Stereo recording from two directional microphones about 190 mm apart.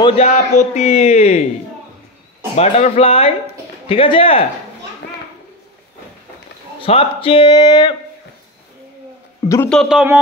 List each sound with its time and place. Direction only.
0.2 s a man's voice: 35° left (ahead or behind)
2.5 s a man's voice: 35° left (ahead or behind)
6.8 s speech: 30° left (ahead or behind)
9.5 s a man's voice: 10° left (ahead or behind)
9.8 s speech: 5° right (ahead or behind)